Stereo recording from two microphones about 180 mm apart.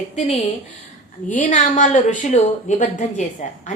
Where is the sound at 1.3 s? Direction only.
45° left (ahead or behind).